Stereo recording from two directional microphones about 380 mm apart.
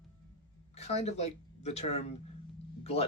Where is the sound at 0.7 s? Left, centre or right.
Centre.